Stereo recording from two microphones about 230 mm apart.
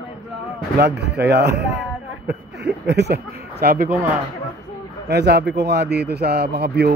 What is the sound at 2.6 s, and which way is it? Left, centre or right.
Speech, right.